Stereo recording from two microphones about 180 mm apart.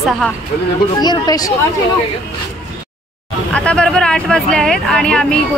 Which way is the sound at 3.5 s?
5° left (ahead or behind).